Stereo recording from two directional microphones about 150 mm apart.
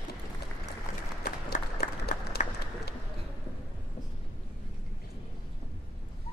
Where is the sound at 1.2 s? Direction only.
90° left.